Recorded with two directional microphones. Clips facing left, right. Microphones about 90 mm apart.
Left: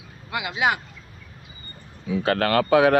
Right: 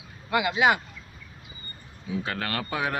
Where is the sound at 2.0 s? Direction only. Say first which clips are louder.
Left 9 dB; 80° left.